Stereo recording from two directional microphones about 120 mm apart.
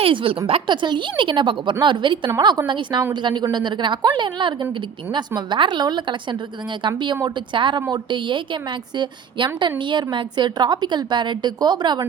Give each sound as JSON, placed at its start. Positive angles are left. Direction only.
{"t": 0.0, "sound": "a woman's voice", "side_deg": -45}